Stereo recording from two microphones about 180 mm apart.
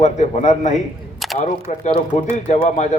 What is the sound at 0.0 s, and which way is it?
Speech, 40° left (ahead or behind).